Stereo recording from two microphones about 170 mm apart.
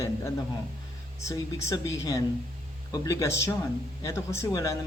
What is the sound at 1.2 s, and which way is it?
Speech, 20° left (ahead or behind).